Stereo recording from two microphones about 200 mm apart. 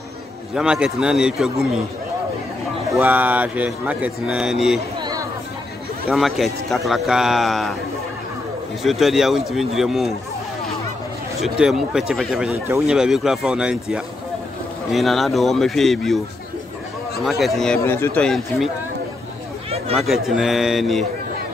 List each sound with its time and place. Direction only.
0.6 s speech: 5° right (ahead or behind)
2.9 s a man's voice: 10° right (ahead or behind)
6.0 s speech: centre (ahead or behind)
8.8 s speech: centre (ahead or behind)
11.4 s speech: 5° right (ahead or behind)
17.2 s speech: centre (ahead or behind)
20.0 s speech: centre (ahead or behind)